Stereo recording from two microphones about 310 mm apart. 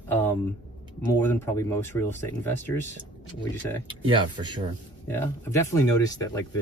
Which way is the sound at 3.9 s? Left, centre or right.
Centre.